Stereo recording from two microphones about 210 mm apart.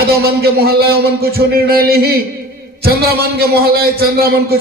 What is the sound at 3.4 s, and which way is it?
A man's voice, 45° right (ahead or behind).